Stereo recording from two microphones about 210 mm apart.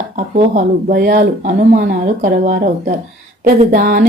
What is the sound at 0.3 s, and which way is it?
Speech, 35° right (ahead or behind).